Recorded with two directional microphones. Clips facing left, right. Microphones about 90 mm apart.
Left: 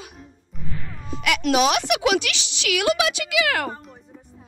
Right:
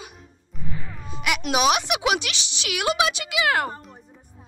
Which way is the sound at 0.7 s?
10° right (ahead or behind).